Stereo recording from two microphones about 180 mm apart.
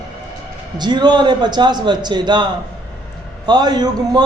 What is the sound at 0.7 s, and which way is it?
A man's voice, 25° right (ahead or behind).